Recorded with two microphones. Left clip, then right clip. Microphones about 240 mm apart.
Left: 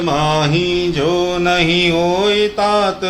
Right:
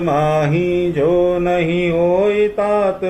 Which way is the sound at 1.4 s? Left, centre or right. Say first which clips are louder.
Left 3 dB; left.